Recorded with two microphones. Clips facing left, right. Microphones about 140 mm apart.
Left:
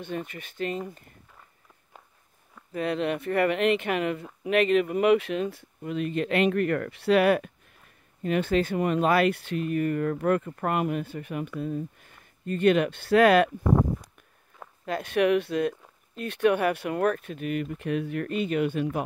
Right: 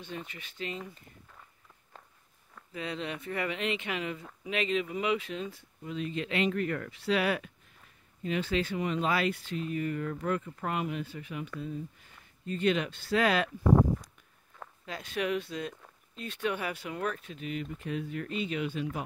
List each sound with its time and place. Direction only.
0.0 s speech: 55° left (ahead or behind)
2.7 s speech: 60° left (ahead or behind)
14.9 s speech: 60° left (ahead or behind)